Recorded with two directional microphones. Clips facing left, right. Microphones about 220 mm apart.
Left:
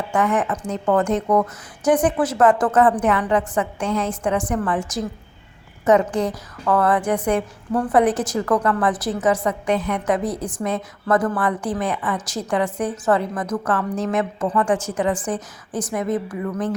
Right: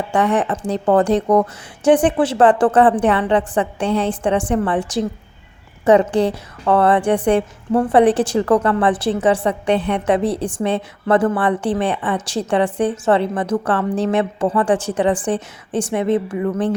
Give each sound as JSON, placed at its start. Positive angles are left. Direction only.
{"t": 0.1, "sound": "a woman's voice", "side_deg": -35}